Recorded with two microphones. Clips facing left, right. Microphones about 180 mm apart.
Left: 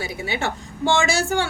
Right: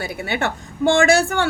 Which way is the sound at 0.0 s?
60° right (ahead or behind).